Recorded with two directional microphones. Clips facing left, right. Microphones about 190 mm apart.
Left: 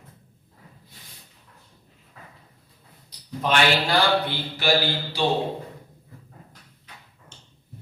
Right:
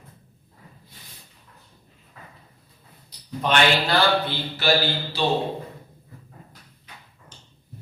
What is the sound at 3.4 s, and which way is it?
Speech, 5° left (ahead or behind).